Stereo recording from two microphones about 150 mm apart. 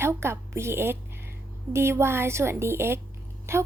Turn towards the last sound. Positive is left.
turn(degrees=-15)  # may be behind; listen again after turning